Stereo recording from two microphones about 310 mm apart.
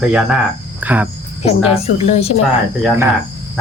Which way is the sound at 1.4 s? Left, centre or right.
Centre.